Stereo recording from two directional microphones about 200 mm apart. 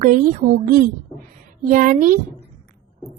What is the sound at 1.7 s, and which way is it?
Speech, 40° right (ahead or behind).